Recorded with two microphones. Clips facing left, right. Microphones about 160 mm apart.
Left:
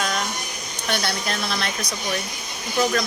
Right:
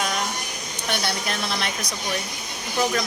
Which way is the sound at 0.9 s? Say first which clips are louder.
Left 1 dB; 15° right (ahead or behind).